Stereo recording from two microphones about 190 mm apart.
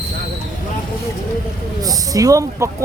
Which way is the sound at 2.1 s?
15° right (ahead or behind).